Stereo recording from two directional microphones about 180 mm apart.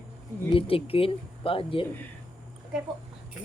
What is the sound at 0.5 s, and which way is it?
Speech, 30° left (ahead or behind).